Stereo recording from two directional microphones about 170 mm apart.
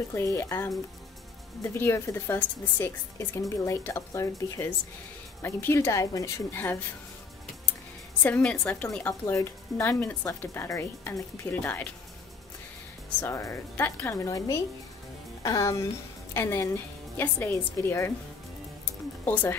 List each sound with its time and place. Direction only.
0.1 s a woman's voice: 15° left (ahead or behind)
8.2 s a woman's voice: 10° left (ahead or behind)
13.2 s a woman's voice: 15° left (ahead or behind)
19.2 s speech: 10° left (ahead or behind)